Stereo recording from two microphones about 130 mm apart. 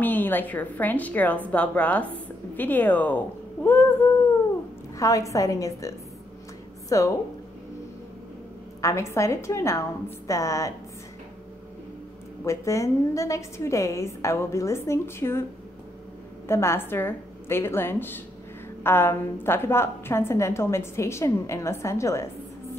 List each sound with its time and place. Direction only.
0.0 s a woman's voice: 15° left (ahead or behind)
3.6 s a sound: 15° left (ahead or behind)
4.9 s a woman's voice: 25° left (ahead or behind)
8.8 s a woman's voice: 20° left (ahead or behind)
12.4 s a woman's voice: 25° left (ahead or behind)
16.4 s a woman's voice: 20° left (ahead or behind)